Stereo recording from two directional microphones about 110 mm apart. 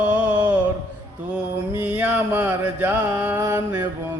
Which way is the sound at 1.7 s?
15° right (ahead or behind).